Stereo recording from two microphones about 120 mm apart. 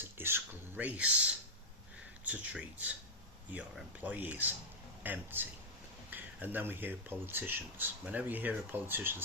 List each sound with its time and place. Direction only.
0.0 s speech: 20° right (ahead or behind)